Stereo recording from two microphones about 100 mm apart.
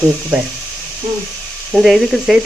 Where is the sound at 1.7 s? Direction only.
Centre (ahead or behind).